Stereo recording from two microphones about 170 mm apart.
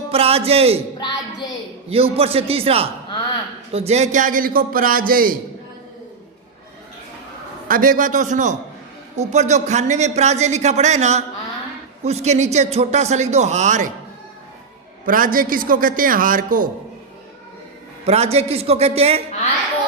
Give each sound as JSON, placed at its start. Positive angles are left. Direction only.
{"t": 0.1, "sound": "a man's voice", "side_deg": -35}
{"t": 1.9, "sound": "a man's voice", "side_deg": -35}
{"t": 7.7, "sound": "a man's voice", "side_deg": -55}
{"t": 15.0, "sound": "a man's voice", "side_deg": -55}
{"t": 18.0, "sound": "speech", "side_deg": -40}